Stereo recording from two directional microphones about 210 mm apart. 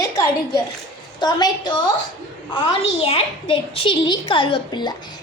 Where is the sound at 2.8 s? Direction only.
30° left (ahead or behind).